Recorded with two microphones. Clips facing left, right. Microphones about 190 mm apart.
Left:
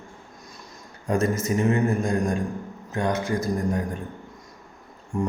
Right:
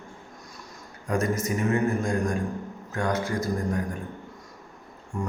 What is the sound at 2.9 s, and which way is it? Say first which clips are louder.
Speech: left 2 dB; 20° left (ahead or behind).